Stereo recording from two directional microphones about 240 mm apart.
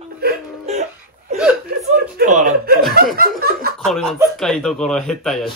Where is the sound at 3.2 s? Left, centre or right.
Right.